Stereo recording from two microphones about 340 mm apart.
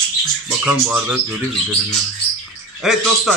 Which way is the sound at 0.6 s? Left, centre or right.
Centre.